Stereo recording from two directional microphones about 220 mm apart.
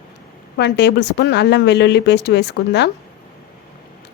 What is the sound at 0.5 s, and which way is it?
Speech, 50° left (ahead or behind).